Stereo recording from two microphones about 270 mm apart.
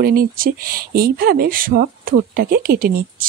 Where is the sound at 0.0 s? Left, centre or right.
Right.